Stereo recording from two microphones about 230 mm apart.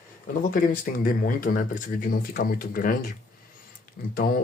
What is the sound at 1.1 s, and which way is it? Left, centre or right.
Speech, left.